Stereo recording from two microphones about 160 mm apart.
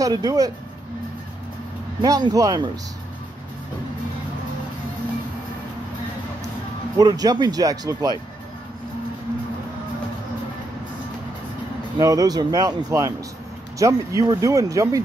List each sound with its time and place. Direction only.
0.0 s speech: 25° right (ahead or behind)
2.0 s speech: 25° right (ahead or behind)
7.0 s speech: 25° right (ahead or behind)
12.0 s speech: 20° right (ahead or behind)